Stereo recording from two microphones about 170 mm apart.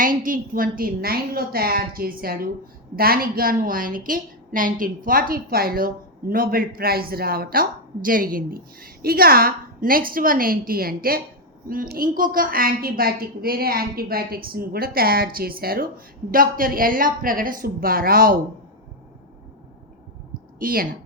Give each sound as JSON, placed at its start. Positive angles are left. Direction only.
{"t": 0.0, "sound": "a woman's voice", "side_deg": -55}
{"t": 20.6, "sound": "speech", "side_deg": -55}